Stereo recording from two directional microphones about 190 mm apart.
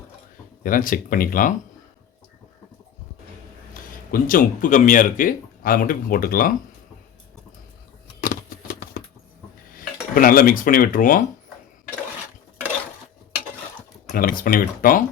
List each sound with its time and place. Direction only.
0.6 s speech: 45° left (ahead or behind)
3.8 s a sound: 45° left (ahead or behind)
4.1 s speech: 45° left (ahead or behind)
8.2 s a sound: 45° left (ahead or behind)
9.7 s speech: 50° left (ahead or behind)
14.1 s speech: 50° left (ahead or behind)